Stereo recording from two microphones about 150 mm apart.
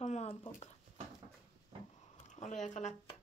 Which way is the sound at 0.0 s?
45° left (ahead or behind).